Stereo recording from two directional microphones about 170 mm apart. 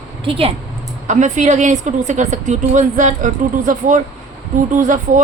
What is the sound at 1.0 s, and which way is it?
Speech, 45° right (ahead or behind).